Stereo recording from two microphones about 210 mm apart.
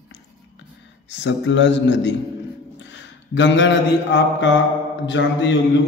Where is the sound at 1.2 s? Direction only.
60° left (ahead or behind).